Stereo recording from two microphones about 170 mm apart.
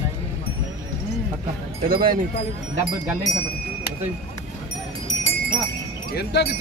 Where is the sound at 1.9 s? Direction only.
60° right (ahead or behind).